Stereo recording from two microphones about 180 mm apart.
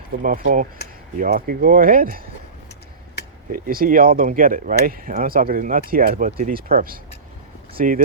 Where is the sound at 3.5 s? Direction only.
50° right (ahead or behind).